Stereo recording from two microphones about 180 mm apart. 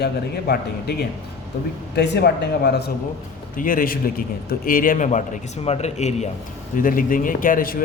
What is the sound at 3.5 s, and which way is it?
A man's voice, 50° left (ahead or behind).